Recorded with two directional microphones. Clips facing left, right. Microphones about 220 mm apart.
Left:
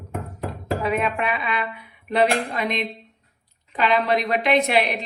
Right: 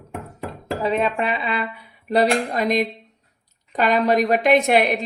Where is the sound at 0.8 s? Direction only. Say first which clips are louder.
Right 3 dB; 30° right (ahead or behind).